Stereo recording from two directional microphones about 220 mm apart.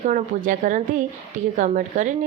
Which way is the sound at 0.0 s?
35° right (ahead or behind).